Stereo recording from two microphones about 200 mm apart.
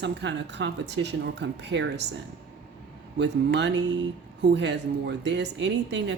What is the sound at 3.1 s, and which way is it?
Speech, 60° right (ahead or behind).